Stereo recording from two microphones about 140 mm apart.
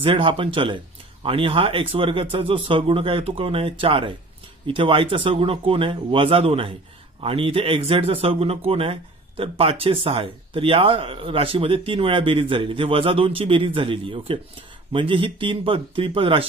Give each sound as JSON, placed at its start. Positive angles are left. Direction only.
{"t": 0.0, "sound": "speech", "side_deg": -40}